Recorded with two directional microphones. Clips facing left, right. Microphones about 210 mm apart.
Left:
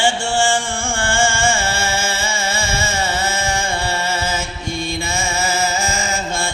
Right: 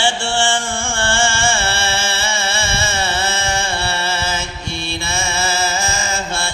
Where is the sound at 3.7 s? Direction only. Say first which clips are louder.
Left 1 dB; 15° left (ahead or behind).